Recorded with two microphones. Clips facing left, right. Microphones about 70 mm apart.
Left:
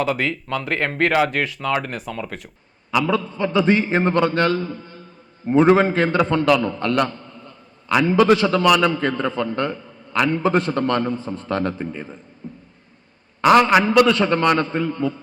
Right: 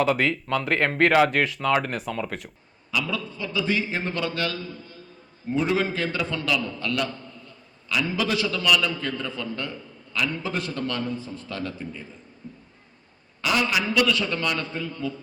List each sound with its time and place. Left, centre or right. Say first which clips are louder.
0.0 s speech: even; centre
2.9 s a man's voice: left 8 dB; left
12.4 s a sound: left 6 dB; left
13.4 s a man's voice: left 11 dB; left